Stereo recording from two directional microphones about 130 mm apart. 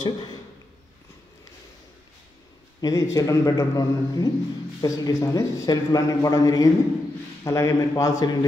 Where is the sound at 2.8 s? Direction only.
25° left (ahead or behind).